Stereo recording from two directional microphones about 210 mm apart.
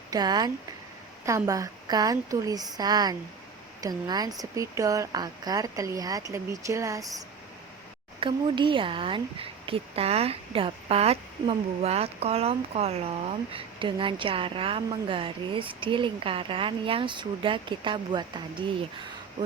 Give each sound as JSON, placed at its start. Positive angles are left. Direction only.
{"t": 0.1, "sound": "a woman's voice", "side_deg": -20}
{"t": 8.2, "sound": "a woman's voice", "side_deg": -25}